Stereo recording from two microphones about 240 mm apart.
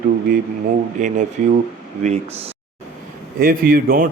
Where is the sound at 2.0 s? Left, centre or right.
Right.